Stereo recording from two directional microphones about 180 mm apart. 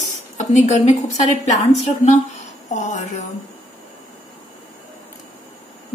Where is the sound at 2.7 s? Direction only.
45° left (ahead or behind).